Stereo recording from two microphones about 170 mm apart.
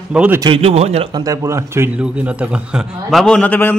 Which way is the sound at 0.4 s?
35° right (ahead or behind).